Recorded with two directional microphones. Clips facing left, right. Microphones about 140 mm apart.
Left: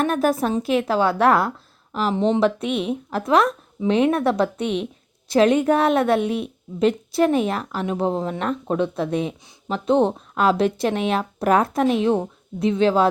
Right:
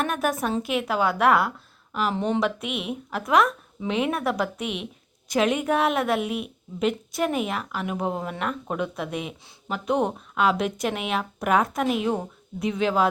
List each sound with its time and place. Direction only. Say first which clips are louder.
0.0 s a woman's voice: left 5 dB; 35° left (ahead or behind)
2.1 s speech: left 7 dB; 20° left (ahead or behind)
2.4 s speech: left 6 dB; 35° left (ahead or behind)
3.8 s speech: left 7 dB; 5° right (ahead or behind)
4.1 s speech: left 6 dB; 30° left (ahead or behind)